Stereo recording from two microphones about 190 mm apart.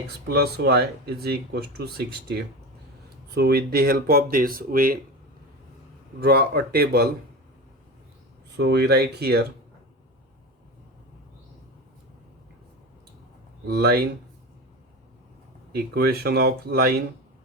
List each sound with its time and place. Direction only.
0.3 s speech: 60° right (ahead or behind)
6.2 s speech: 55° right (ahead or behind)
8.5 s speech: 60° right (ahead or behind)
13.7 s speech: 55° right (ahead or behind)
15.7 s speech: 55° right (ahead or behind)